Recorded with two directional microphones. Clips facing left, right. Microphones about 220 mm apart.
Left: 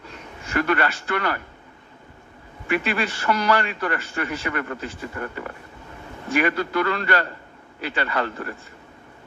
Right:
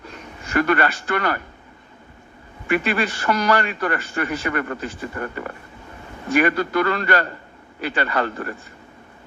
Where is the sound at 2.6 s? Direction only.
45° right (ahead or behind).